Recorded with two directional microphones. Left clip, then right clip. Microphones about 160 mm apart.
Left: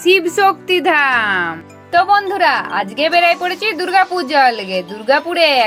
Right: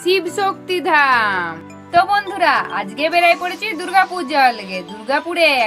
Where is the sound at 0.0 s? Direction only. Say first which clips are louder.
Left 5 dB; 20° left (ahead or behind).